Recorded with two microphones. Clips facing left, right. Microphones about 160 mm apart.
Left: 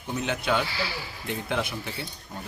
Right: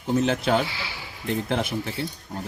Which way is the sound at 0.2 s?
35° right (ahead or behind).